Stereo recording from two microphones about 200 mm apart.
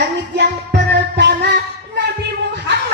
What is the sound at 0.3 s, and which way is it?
Music, 55° right (ahead or behind).